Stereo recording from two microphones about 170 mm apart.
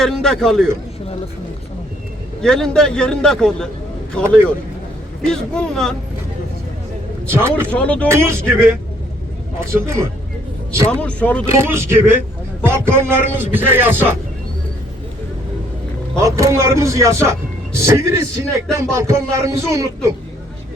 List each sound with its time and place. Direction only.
0.0 s a man's voice: 5° left (ahead or behind)
2.4 s a man's voice: 5° left (ahead or behind)
7.3 s speech: 15° right (ahead or behind)
7.7 s speech: 10° left (ahead or behind)
8.0 s speech: 15° right (ahead or behind)
9.6 s speech: 15° right (ahead or behind)
10.9 s speech: 10° left (ahead or behind)
11.4 s speech: 15° right (ahead or behind)
16.1 s speech: 15° right (ahead or behind)